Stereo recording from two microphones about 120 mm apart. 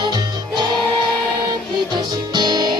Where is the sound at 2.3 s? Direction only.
35° right (ahead or behind).